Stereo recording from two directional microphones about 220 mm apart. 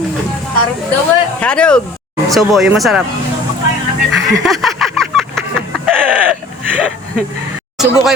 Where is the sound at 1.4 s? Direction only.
5° left (ahead or behind).